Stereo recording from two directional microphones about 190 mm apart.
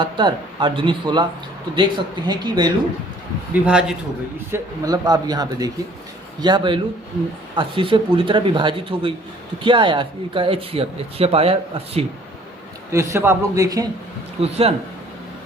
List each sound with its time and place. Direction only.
0.0 s speech: 25° right (ahead or behind)
3.5 s a man's voice: 5° right (ahead or behind)
4.5 s speech: 20° right (ahead or behind)
12.9 s speech: 15° right (ahead or behind)
14.4 s speech: 35° right (ahead or behind)